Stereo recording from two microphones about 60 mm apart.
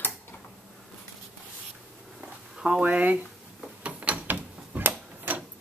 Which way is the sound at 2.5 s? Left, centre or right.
Centre.